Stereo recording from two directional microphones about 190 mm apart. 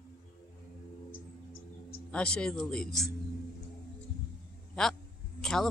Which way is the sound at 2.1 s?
5° left (ahead or behind).